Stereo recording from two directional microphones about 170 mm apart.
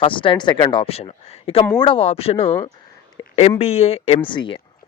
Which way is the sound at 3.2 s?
25° left (ahead or behind).